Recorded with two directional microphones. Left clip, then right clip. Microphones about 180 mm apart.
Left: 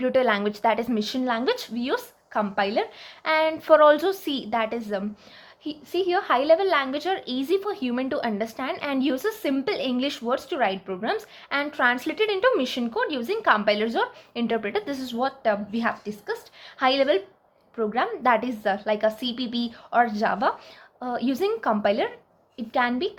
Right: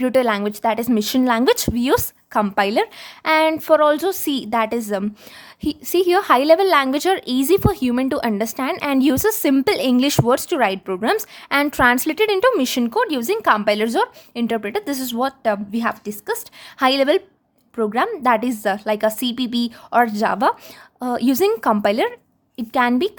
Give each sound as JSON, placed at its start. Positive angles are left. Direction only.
{"t": 0.0, "sound": "a woman's voice", "side_deg": -45}
{"t": 14.3, "sound": "a woman's voice", "side_deg": -35}